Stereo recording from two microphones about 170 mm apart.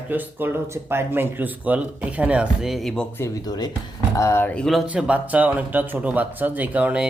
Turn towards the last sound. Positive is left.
turn(degrees=-5)  # may be behind; listen again after turning